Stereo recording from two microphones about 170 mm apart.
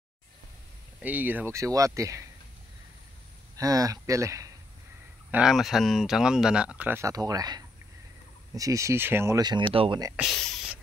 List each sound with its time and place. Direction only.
1.0 s speech: 10° right (ahead or behind)
3.5 s speech: 20° right (ahead or behind)
5.3 s speech: 5° right (ahead or behind); by 10.1 s 25° right (ahead or behind)
10.3 s a sound: centre (ahead or behind)